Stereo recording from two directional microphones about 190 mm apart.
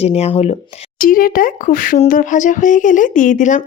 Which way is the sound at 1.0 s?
45° left (ahead or behind).